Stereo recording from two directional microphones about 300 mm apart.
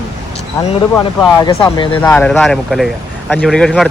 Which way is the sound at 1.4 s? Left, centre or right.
Centre.